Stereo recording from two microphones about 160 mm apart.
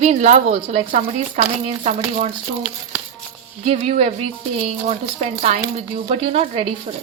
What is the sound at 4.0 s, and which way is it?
Speech, 40° right (ahead or behind).